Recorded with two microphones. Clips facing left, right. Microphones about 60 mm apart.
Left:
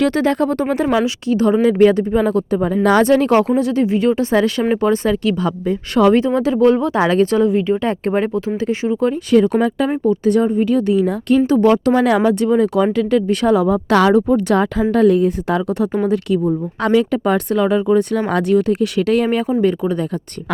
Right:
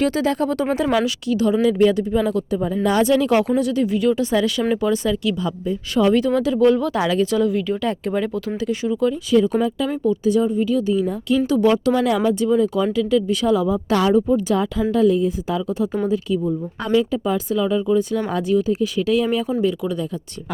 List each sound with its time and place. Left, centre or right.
0.0 s speech: left
0.9 s speech: left
6.1 s speech: left
7.4 s speech: left
9.3 s speech: left
12.0 s speech: left
19.8 s speech: left